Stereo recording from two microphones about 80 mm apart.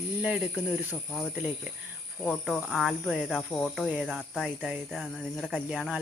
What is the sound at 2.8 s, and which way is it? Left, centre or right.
Speech, centre.